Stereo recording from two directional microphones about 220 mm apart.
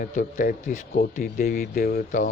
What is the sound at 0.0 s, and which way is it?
Speech, 40° left (ahead or behind).